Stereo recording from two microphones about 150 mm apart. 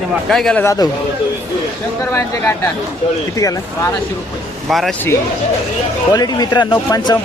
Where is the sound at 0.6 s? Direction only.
20° left (ahead or behind).